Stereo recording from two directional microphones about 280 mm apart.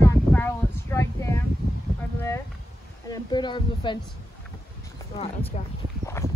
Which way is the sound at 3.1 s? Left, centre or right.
Centre.